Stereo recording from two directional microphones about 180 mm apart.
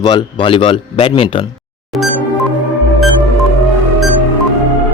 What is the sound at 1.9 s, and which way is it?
Music, centre (ahead or behind).